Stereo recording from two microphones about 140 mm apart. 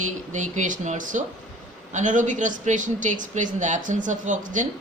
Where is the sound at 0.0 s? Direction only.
60° right (ahead or behind).